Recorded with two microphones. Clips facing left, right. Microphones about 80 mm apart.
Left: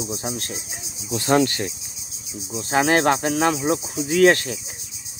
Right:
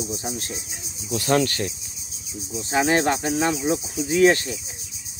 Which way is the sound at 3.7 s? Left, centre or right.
Left.